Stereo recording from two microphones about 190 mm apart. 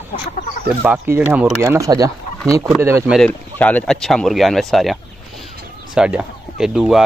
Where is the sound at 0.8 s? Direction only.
10° right (ahead or behind).